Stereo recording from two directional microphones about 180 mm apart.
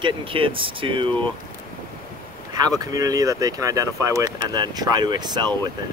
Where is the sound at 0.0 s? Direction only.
30° right (ahead or behind).